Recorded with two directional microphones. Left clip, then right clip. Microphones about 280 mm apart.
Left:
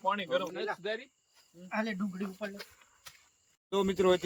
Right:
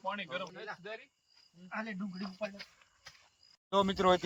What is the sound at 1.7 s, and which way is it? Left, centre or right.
Speech, left.